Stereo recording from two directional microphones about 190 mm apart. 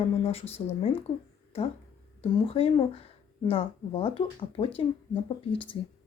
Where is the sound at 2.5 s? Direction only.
30° left (ahead or behind).